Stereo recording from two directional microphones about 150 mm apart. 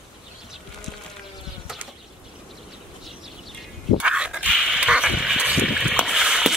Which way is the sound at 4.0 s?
5° right (ahead or behind).